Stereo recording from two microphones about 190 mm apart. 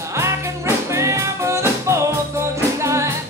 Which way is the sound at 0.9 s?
15° right (ahead or behind).